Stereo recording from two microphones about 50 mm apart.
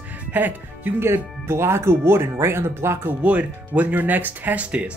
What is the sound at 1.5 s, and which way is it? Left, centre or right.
Speech, right.